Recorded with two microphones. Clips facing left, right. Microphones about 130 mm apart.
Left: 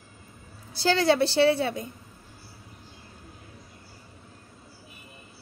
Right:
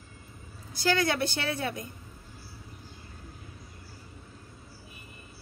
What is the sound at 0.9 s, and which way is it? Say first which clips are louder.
Speech: left 11 dB; 30° left (ahead or behind).